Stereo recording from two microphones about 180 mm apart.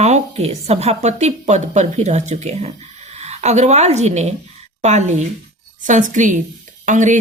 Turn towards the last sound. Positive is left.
turn(degrees=-45)  # may be behind; listen again after turning